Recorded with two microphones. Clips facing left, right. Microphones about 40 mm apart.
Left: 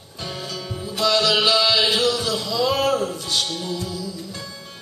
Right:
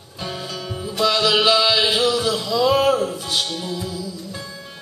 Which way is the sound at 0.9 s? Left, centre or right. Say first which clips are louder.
Right 1 dB; centre.